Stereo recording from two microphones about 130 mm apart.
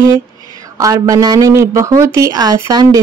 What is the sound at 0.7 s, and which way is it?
Speech, 25° right (ahead or behind).